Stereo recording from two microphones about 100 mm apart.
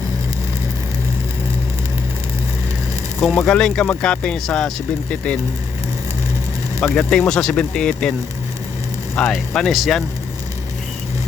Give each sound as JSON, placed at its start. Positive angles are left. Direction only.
{"t": 3.2, "sound": "speech", "side_deg": 0}
{"t": 6.7, "sound": "speech", "side_deg": 20}
{"t": 7.1, "sound": "speech", "side_deg": 5}
{"t": 9.1, "sound": "speech", "side_deg": 0}